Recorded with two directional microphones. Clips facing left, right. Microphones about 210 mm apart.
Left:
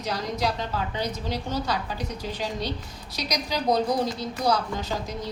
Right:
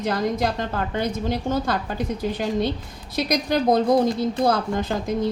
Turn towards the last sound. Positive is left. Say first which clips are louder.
# right 6 dB
turn(degrees=-50)  # may be behind; listen again after turning